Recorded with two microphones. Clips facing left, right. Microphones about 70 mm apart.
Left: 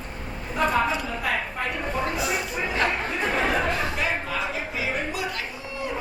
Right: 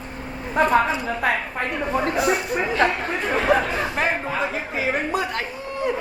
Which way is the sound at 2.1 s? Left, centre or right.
Right.